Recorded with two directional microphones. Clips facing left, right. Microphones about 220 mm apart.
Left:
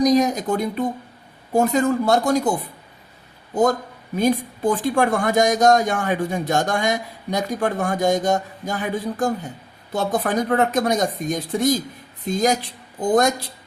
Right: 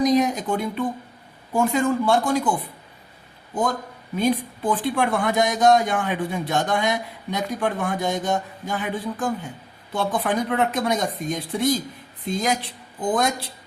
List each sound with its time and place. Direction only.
0.0 s a man's voice: 40° left (ahead or behind)